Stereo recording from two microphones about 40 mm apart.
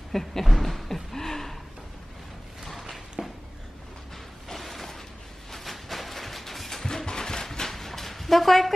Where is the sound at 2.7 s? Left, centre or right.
Centre.